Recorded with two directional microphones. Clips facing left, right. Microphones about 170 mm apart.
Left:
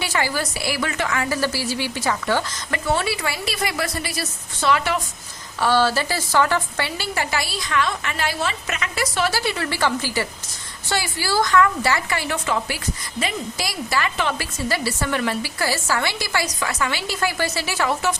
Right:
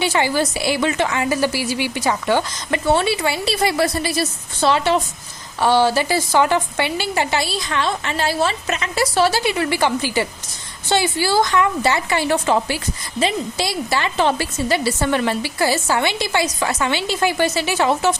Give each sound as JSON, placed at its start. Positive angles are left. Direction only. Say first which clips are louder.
{"t": 0.0, "sound": "a woman's voice", "louder": "right 5 dB", "side_deg": -25}
{"t": 9.4, "sound": "a woman's voice", "louder": "right 4 dB", "side_deg": -15}